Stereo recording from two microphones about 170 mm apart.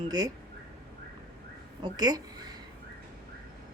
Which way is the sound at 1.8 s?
25° right (ahead or behind).